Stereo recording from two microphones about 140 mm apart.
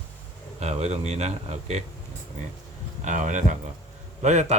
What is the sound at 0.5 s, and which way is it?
A man's voice, 50° right (ahead or behind).